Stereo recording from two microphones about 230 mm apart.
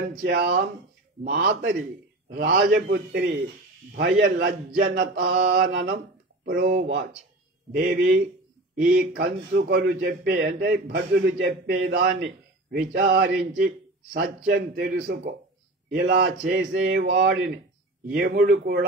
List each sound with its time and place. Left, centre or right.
0.2 s a man's voice: right
11.3 s a man's voice: right